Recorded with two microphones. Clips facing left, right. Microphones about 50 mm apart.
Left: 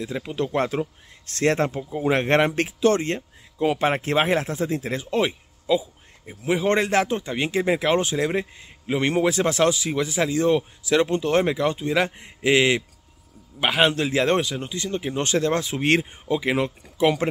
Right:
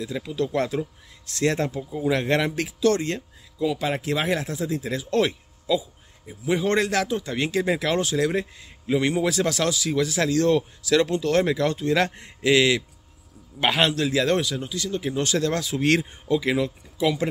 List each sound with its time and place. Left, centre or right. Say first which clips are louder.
0.0 s speech: even; left
3.6 s speech: left 3 dB; left
5.7 s a sound: left 2 dB; left
6.7 s speech: left 4 dB; left
12.4 s speech: even; left
13.6 s a man's voice: left 1 dB; centre
13.8 s speech: left 1 dB; left
16.5 s speech: left 1 dB; left